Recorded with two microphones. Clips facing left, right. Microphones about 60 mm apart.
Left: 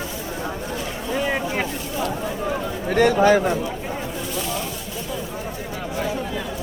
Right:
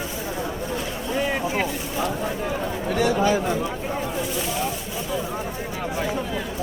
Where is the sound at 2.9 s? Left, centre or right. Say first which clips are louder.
Left 5 dB; left.